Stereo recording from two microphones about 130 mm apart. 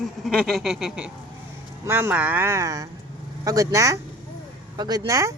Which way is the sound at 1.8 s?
20° right (ahead or behind).